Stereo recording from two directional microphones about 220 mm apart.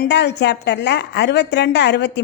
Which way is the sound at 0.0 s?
50° left (ahead or behind).